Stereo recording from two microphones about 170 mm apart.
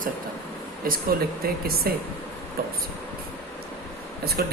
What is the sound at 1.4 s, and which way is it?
Speech, 60° right (ahead or behind).